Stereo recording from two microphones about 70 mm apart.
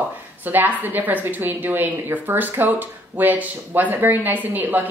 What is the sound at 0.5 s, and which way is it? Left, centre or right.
Speech, right.